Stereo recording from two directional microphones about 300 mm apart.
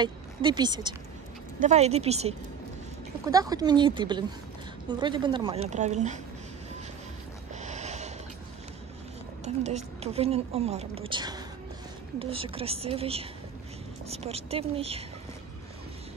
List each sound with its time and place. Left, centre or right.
0.0 s a woman's voice: centre
7.5 s a sound: right
9.4 s a woman's voice: right